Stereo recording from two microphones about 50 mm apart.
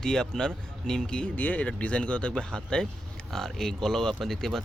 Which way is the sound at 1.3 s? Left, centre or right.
Left.